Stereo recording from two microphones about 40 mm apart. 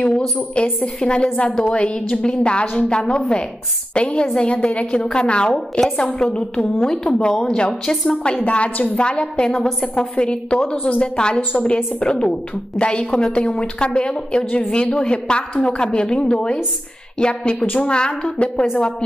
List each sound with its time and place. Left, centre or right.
0.6 s a woman's voice: left; by 8.2 s centre
8.5 s a woman's voice: left
9.7 s a woman's voice: centre
10.1 s a woman's voice: left